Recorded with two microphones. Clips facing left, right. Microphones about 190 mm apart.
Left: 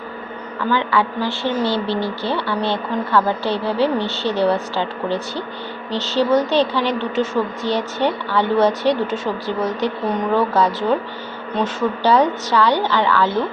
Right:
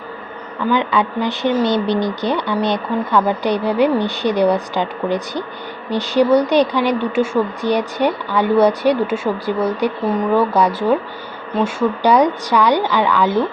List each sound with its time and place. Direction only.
0.7 s speech: 20° right (ahead or behind)